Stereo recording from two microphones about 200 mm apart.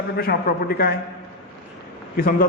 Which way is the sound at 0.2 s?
50° left (ahead or behind).